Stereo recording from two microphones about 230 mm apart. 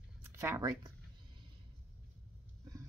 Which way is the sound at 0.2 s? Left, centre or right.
Centre.